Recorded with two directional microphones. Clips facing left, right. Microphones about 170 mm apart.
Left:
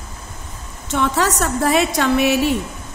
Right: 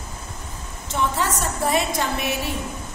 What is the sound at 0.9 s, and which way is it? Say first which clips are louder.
A woman's voice: left 5 dB; 75° left (ahead or behind).